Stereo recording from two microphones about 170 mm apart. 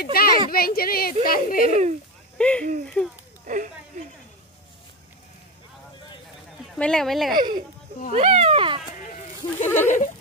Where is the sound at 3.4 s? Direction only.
50° right (ahead or behind).